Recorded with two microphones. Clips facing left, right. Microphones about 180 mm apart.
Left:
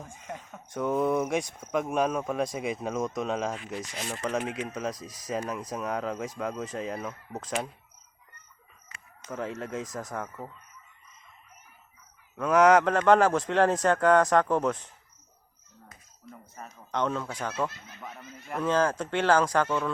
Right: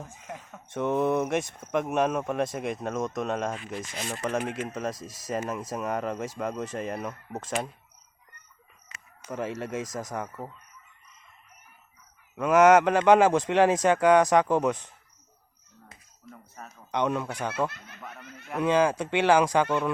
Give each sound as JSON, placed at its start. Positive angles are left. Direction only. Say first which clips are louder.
{"t": 0.0, "sound": "speech", "louder": "even", "side_deg": -5}
{"t": 9.2, "sound": "a man's voice", "louder": "right 2 dB", "side_deg": -5}
{"t": 12.4, "sound": "a man's voice", "louder": "right 2 dB", "side_deg": 0}
{"t": 16.6, "sound": "speech", "louder": "left 1 dB", "side_deg": 0}
{"t": 16.9, "sound": "a man's voice", "louder": "right 2 dB", "side_deg": -15}